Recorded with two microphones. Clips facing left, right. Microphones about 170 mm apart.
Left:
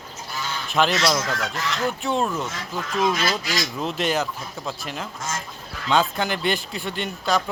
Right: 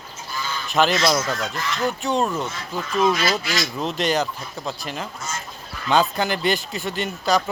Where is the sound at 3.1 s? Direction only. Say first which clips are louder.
Right 2 dB; 50° left (ahead or behind).